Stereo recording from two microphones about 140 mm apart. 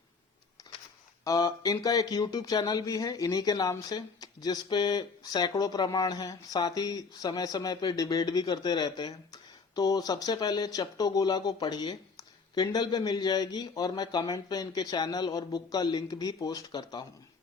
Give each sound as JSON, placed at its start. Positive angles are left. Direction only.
{"t": 1.2, "sound": "speech", "side_deg": 25}